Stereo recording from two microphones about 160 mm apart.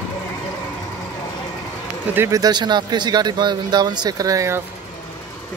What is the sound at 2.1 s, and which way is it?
Speech, 20° right (ahead or behind).